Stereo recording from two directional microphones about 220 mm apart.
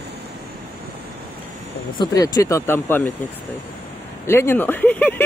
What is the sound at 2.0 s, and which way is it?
Speech, 15° left (ahead or behind).